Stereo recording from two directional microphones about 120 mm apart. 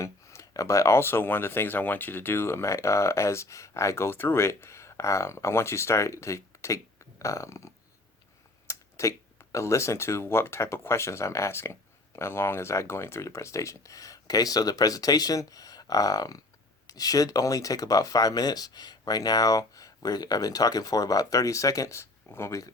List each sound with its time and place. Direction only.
0.0 s speech: 25° left (ahead or behind)